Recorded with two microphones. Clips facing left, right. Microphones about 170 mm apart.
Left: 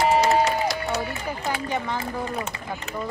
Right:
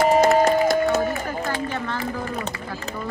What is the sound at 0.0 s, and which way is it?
Music, 50° right (ahead or behind).